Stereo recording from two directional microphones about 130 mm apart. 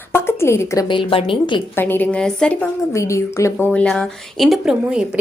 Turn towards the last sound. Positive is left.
turn(degrees=-5)  # may be behind; listen again after turning